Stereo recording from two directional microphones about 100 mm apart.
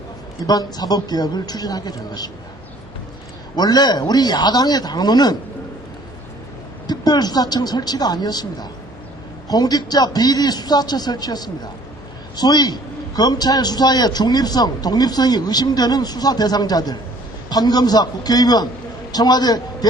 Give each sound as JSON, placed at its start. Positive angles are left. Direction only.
{"t": 0.4, "sound": "a man's voice", "side_deg": 40}
{"t": 3.5, "sound": "a man's voice", "side_deg": 45}
{"t": 6.8, "sound": "a man's voice", "side_deg": 40}